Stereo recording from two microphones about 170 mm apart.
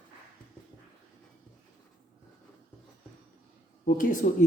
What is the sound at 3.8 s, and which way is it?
Speech, 55° left (ahead or behind).